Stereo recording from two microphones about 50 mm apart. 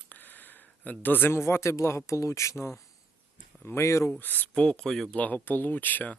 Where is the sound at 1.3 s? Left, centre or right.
Left.